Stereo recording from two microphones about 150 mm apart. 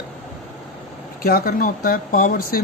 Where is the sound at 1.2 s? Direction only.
85° left.